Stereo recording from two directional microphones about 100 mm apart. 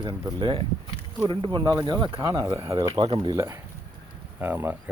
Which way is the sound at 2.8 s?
55° right (ahead or behind).